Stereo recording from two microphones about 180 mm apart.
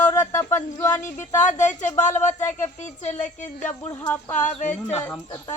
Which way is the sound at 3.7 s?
10° left (ahead or behind).